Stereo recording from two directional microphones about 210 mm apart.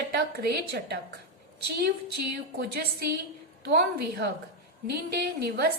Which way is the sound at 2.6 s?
50° right (ahead or behind).